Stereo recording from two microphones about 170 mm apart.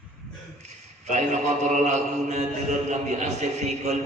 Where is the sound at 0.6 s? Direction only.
45° right (ahead or behind).